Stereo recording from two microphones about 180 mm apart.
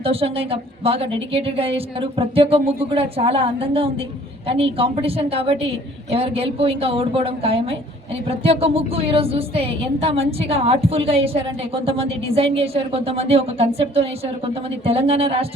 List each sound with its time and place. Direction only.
0.0 s speech: 30° right (ahead or behind)